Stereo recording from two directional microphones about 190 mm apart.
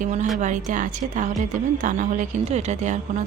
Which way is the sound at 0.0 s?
40° right (ahead or behind).